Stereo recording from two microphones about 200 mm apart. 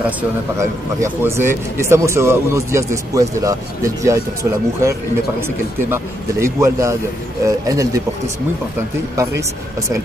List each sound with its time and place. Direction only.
0.6 s speech: 15° right (ahead or behind)
6.4 s speech: 15° right (ahead or behind)
9.1 s speech: 15° right (ahead or behind)